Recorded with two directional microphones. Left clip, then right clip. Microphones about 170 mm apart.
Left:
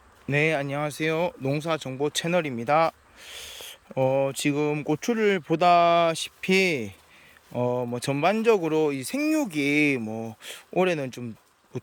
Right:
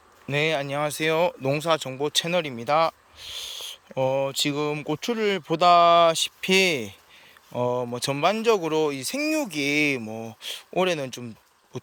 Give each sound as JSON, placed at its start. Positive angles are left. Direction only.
{"t": 0.3, "sound": "speech", "side_deg": 15}